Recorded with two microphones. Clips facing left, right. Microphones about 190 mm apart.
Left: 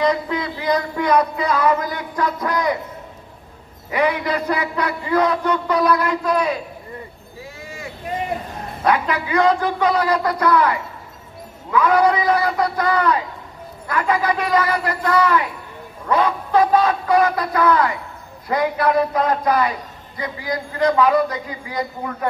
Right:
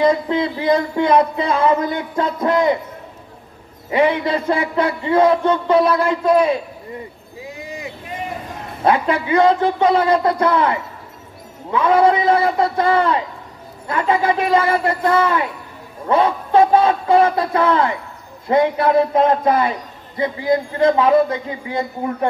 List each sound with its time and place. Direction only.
0.0 s speech: 25° right (ahead or behind)
3.9 s speech: 25° right (ahead or behind)
7.4 s a sound: 20° right (ahead or behind)
8.8 s speech: 25° right (ahead or behind)